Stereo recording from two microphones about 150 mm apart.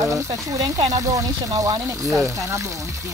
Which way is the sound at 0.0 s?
20° right (ahead or behind).